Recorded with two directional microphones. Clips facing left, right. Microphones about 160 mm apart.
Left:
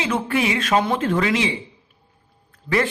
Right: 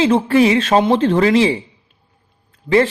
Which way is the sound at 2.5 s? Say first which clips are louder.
Right 7 dB; 25° right (ahead or behind).